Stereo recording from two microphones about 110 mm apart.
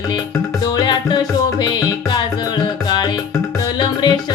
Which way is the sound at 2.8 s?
40° left (ahead or behind).